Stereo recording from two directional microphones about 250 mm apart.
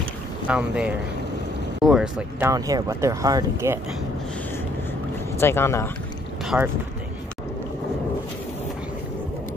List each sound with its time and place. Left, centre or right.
0.5 s speech: centre
2.5 s speech: centre
5.4 s speech: centre
6.4 s speech: centre